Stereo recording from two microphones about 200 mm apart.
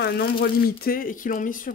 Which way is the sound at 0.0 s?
50° left (ahead or behind).